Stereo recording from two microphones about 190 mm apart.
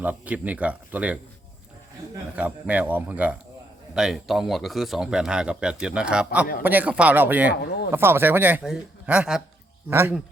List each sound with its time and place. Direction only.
0.0 s a man's voice: 10° right (ahead or behind)
2.3 s a man's voice: 5° right (ahead or behind)
7.5 s speech: 60° left (ahead or behind)
7.9 s a man's voice: 10° right (ahead or behind)